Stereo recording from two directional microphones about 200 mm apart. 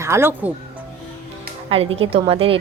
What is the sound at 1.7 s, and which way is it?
Speech, 30° right (ahead or behind).